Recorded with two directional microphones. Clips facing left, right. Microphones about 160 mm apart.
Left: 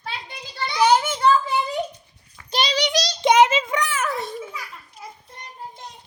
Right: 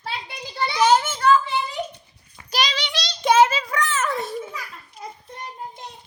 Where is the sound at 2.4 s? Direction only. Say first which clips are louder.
Even; 25° left (ahead or behind).